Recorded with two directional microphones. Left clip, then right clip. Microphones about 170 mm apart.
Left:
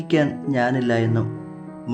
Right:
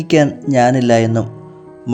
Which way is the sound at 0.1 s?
35° right (ahead or behind).